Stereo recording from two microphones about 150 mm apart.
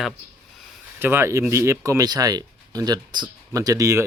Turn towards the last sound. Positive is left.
turn(degrees=-20)  # may be behind; listen again after turning